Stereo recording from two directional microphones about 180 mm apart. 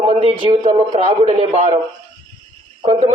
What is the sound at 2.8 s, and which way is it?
Speech, 35° right (ahead or behind).